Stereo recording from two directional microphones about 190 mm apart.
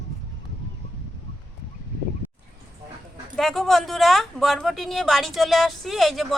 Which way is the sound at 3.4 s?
Centre (ahead or behind).